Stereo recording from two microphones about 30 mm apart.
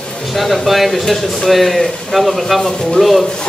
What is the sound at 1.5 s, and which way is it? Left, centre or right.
A man's voice, centre.